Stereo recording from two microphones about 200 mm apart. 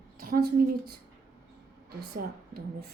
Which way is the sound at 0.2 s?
45° right (ahead or behind).